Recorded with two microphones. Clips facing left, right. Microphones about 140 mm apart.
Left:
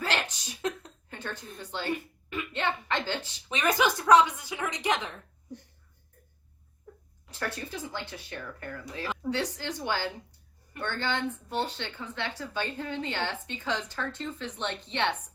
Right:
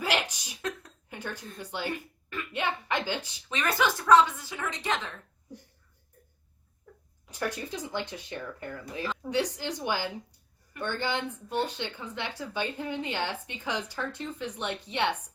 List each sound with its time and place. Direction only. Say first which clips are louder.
0.0 s a sound: right 2 dB; 10° right (ahead or behind)
1.1 s a woman's voice: right 1 dB; 10° right (ahead or behind)
3.5 s speech: left 2 dB; 15° left (ahead or behind)
7.3 s a woman's voice: right 2 dB; 15° right (ahead or behind)